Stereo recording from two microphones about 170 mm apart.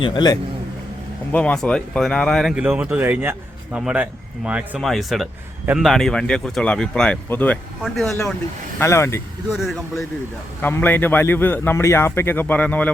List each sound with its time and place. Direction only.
0.0 s a man's voice: 25° left (ahead or behind)
1.3 s speech: 5° left (ahead or behind)
8.8 s a man's voice: 15° left (ahead or behind)
10.6 s a man's voice: 10° left (ahead or behind)